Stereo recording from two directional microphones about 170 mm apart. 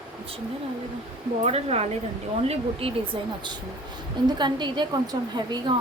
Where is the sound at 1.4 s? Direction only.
35° right (ahead or behind).